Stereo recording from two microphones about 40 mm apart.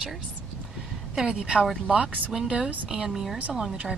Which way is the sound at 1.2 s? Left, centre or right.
Right.